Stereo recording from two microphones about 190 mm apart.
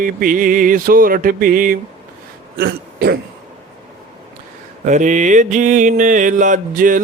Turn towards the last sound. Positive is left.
turn(degrees=-45)  # may be behind; listen again after turning